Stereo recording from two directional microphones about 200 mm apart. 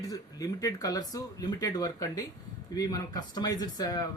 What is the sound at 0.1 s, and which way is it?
Speech, 15° left (ahead or behind).